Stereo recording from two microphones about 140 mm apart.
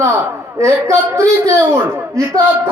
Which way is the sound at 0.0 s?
20° right (ahead or behind).